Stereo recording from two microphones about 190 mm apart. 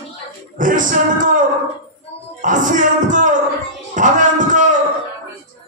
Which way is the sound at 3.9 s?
40° right (ahead or behind).